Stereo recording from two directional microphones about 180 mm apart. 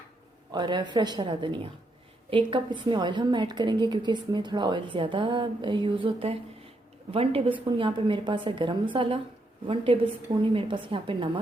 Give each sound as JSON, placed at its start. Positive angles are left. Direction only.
{"t": 0.5, "sound": "a woman's voice", "side_deg": -25}